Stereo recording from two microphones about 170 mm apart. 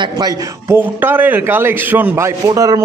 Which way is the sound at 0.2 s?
15° right (ahead or behind).